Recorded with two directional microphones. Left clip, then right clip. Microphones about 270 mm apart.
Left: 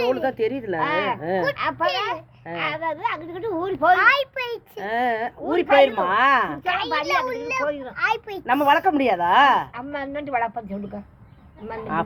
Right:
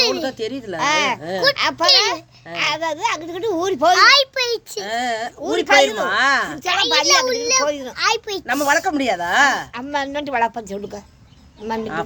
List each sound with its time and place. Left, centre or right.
0.1 s speech: centre
0.8 s a child's voice: right
4.8 s speech: centre
5.5 s a child's voice: right
6.1 s speech: centre
6.7 s a child's voice: right
8.4 s speech: centre
9.7 s a woman's voice: right